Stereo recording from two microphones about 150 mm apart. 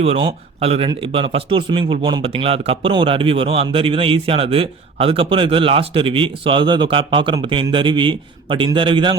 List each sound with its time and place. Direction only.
0.0 s speech: 40° right (ahead or behind)